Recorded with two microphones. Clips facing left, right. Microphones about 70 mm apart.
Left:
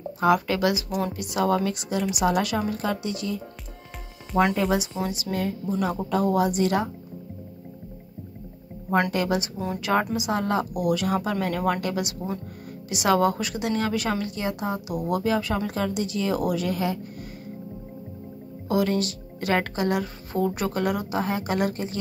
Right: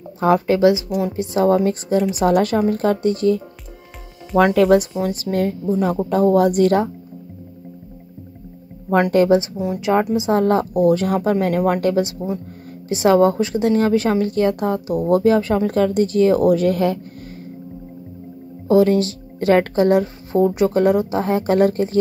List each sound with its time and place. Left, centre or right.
0.2 s speech: right
0.8 s a woman's voice: centre
1.1 s speech: right
4.6 s speech: right
5.0 s speech: right
5.7 s speech: right
9.1 s speech: right
9.8 s speech: right
10.4 s speech: right
14.3 s speech: right
18.7 s speech: right